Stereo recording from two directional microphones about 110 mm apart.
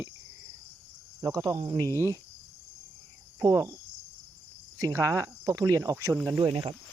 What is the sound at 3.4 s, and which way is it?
Speech, 30° right (ahead or behind).